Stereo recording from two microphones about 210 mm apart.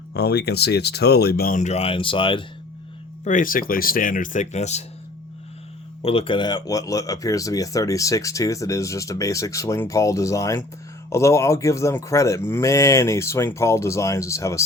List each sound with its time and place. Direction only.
0.1 s speech: 50° left (ahead or behind); by 2.4 s 25° left (ahead or behind)
3.2 s speech: 40° left (ahead or behind)
6.0 s speech: 25° left (ahead or behind)